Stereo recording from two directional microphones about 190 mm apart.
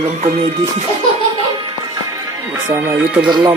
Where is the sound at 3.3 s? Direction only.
25° right (ahead or behind).